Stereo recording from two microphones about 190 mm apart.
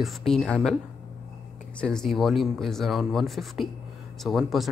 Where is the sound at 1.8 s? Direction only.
5° left (ahead or behind).